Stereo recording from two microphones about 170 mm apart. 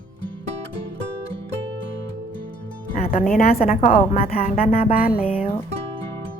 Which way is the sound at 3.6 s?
55° left (ahead or behind).